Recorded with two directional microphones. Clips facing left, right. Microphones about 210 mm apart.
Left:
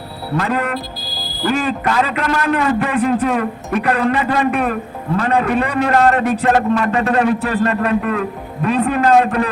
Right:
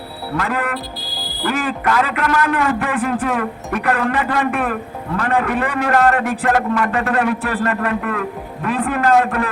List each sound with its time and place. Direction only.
0.3 s a man's voice: 20° left (ahead or behind)